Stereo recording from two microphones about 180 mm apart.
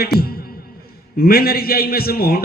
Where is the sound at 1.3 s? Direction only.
55° left (ahead or behind).